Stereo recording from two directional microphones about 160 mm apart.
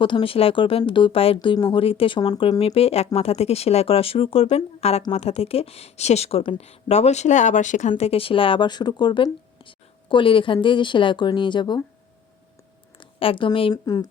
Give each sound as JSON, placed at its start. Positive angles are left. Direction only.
{"t": 0.0, "sound": "speech", "side_deg": 35}
{"t": 13.0, "sound": "a woman's voice", "side_deg": 35}